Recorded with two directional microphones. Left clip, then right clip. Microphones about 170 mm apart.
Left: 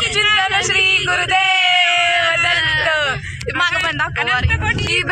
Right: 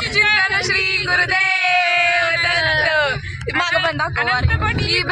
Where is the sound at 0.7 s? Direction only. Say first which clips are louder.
Left 3 dB; 25° left (ahead or behind).